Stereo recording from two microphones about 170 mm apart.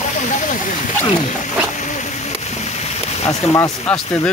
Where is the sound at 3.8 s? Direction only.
5° left (ahead or behind).